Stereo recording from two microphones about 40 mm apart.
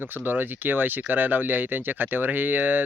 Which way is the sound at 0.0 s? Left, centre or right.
Right.